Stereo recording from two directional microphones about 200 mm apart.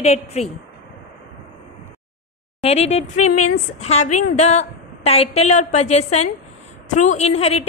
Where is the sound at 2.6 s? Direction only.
35° left (ahead or behind).